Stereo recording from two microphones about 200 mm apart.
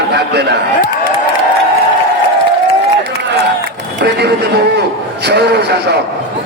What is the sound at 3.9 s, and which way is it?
A man's voice, 55° right (ahead or behind).